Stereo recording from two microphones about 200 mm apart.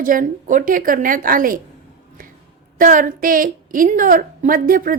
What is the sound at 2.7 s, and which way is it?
A woman's voice, 40° right (ahead or behind).